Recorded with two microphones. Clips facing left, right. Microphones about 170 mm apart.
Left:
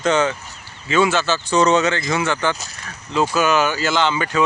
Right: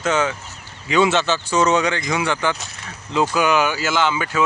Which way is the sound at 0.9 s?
20° right (ahead or behind).